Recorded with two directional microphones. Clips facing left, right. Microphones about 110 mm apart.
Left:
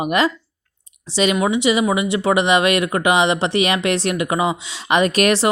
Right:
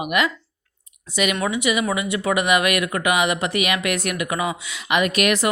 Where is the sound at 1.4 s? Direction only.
25° left (ahead or behind).